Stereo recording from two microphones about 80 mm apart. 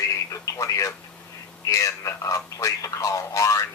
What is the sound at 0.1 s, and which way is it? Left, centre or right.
Radio, left.